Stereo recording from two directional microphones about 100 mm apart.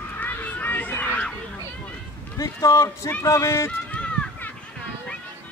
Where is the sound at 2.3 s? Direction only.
35° left (ahead or behind).